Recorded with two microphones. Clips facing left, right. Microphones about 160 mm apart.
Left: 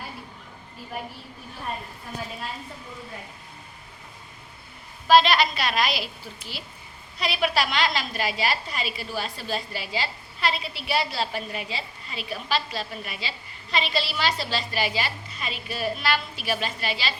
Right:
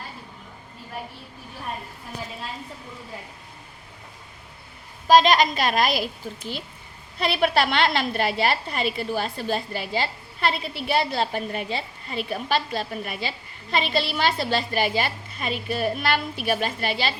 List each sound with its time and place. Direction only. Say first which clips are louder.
5.0 s a woman's voice: right 2 dB; 45° right (ahead or behind)